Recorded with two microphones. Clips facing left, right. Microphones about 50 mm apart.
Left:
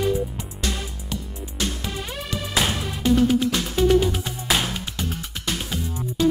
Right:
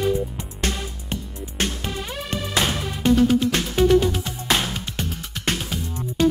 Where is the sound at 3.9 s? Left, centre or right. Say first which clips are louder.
Right 1 dB; centre.